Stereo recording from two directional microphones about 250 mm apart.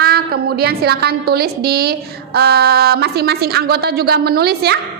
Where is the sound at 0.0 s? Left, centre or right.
Right.